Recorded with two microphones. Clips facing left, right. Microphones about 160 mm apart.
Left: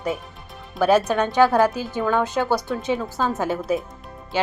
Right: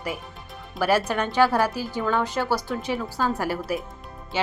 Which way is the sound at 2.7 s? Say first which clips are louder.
Left 3 dB; 5° right (ahead or behind).